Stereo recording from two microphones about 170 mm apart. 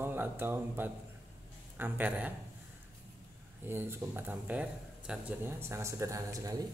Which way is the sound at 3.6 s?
15° right (ahead or behind).